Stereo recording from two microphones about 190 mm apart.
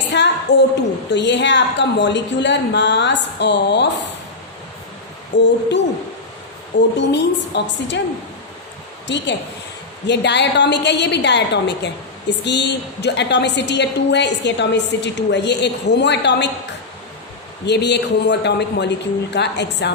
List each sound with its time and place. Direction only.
0.1 s a woman's voice: 65° left (ahead or behind)
5.3 s a woman's voice: 70° left (ahead or behind)
6.7 s a woman's voice: 65° left (ahead or behind)
9.0 s a woman's voice: 65° left (ahead or behind)
17.7 s a woman's voice: 65° left (ahead or behind)